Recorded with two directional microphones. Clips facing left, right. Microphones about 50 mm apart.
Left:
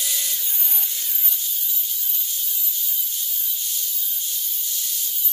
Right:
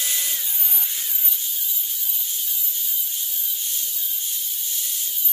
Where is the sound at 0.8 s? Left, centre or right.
Centre.